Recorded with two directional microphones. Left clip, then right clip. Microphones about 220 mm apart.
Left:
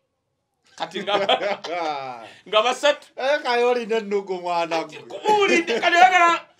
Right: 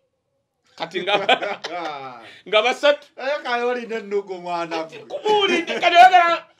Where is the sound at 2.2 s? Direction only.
50° right (ahead or behind); by 3.0 s 35° right (ahead or behind).